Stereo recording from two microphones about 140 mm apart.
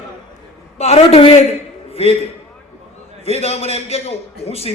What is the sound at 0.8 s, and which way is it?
A man's voice, 45° left (ahead or behind).